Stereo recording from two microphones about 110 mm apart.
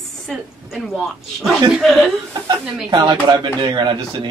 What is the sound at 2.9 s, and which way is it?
A man's voice, 45° right (ahead or behind).